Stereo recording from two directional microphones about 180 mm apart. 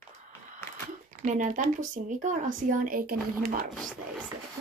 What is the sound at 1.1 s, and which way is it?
Speech, 45° right (ahead or behind).